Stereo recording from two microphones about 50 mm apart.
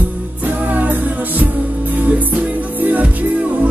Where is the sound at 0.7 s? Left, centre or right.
Right.